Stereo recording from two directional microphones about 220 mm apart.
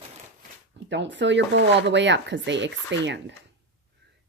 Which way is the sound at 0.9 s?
55° right (ahead or behind).